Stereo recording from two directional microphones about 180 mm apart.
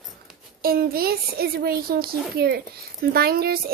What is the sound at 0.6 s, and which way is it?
Speech, 55° right (ahead or behind).